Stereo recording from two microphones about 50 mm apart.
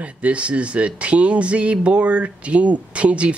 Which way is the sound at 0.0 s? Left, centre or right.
Right.